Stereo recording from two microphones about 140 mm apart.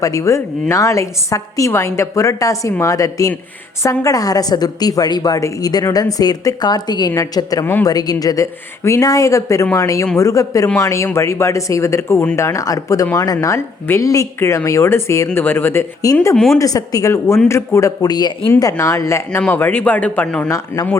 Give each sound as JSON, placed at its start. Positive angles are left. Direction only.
{"t": 0.0, "sound": "a woman's voice", "side_deg": 20}
{"t": 7.9, "sound": "a woman's voice", "side_deg": 25}
{"t": 16.3, "sound": "speech", "side_deg": 0}
{"t": 16.6, "sound": "a woman's voice", "side_deg": 25}
{"t": 18.5, "sound": "a woman's voice", "side_deg": 20}